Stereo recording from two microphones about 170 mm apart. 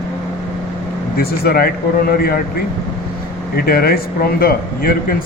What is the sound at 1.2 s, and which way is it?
Speech, 65° left (ahead or behind).